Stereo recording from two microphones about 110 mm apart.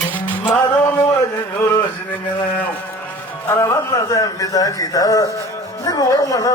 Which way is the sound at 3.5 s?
30° left (ahead or behind).